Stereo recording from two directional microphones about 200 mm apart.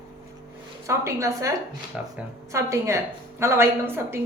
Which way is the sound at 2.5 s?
15° right (ahead or behind).